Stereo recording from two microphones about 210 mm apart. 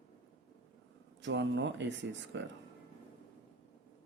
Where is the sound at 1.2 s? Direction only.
60° right (ahead or behind).